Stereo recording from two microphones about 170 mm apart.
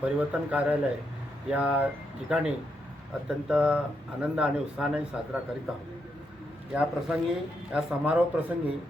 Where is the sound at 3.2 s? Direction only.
5° right (ahead or behind).